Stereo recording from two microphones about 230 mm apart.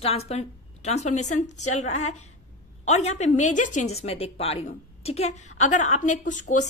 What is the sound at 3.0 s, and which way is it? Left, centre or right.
A woman's voice, left.